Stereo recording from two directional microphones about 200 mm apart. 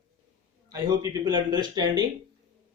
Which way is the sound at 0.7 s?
15° right (ahead or behind).